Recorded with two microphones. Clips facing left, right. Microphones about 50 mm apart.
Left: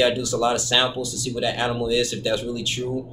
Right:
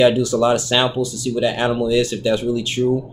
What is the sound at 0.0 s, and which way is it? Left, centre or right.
Speech, right.